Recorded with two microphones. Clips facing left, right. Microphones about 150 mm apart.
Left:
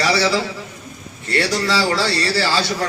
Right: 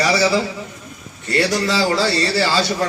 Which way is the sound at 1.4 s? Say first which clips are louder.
Right 1 dB; 20° right (ahead or behind).